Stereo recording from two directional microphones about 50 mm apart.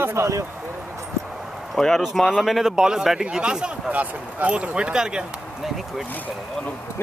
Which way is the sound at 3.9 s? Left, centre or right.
Right.